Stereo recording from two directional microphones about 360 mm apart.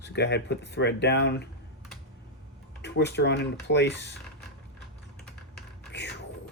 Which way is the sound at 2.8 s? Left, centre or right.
Left.